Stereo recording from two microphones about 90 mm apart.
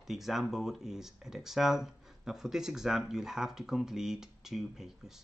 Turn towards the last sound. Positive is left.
turn(degrees=-5)  # may be behind; listen again after turning